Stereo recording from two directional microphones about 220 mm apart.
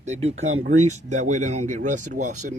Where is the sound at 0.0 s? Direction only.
30° right (ahead or behind).